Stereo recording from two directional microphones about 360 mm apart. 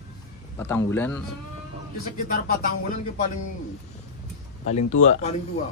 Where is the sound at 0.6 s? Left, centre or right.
Centre.